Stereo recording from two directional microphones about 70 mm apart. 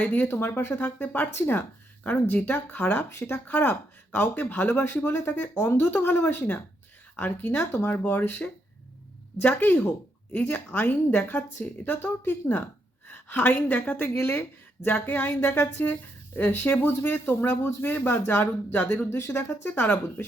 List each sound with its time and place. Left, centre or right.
0.0 s speech: left